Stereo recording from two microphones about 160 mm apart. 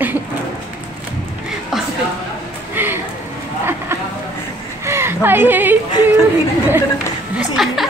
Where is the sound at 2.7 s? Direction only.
15° right (ahead or behind).